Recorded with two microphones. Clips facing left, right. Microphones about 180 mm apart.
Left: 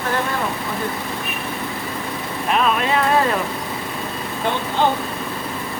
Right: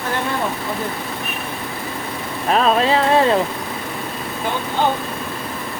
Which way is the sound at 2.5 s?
35° right (ahead or behind).